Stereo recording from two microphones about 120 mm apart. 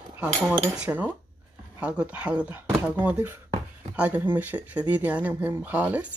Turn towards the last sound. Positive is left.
turn(degrees=-15)  # may be behind; listen again after turning